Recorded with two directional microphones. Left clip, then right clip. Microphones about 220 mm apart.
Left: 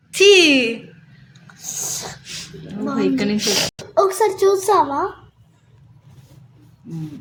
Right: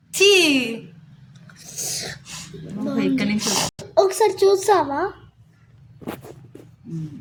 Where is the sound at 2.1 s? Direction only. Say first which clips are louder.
Left 2 dB; 25° right (ahead or behind).